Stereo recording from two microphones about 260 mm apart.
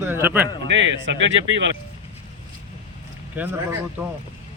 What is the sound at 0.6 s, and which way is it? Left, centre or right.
Speech, right.